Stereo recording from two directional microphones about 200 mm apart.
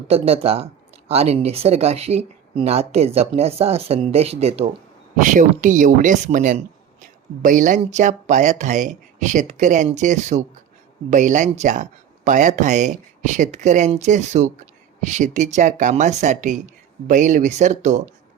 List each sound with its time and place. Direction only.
0.1 s speech: 30° right (ahead or behind)